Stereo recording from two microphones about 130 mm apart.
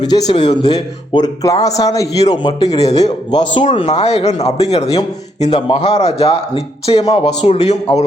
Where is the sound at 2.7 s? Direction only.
55° left (ahead or behind).